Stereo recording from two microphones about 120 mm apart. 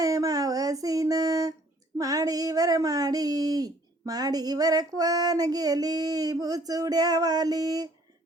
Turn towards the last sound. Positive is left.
turn(degrees=-35)  # may be behind; listen again after turning